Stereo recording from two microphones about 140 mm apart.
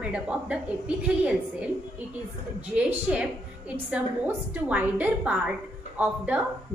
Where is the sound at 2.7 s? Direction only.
10° right (ahead or behind).